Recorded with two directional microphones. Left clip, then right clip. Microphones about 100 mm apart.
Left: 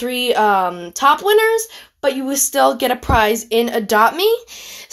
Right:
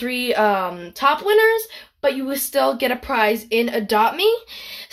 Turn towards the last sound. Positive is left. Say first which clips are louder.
# left 3 dB
turn(degrees=50)  # may be behind; listen again after turning